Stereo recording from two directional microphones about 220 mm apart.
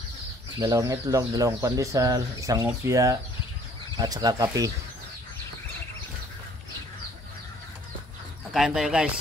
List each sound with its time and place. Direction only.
0.6 s speech: 15° right (ahead or behind)
8.5 s speech: centre (ahead or behind)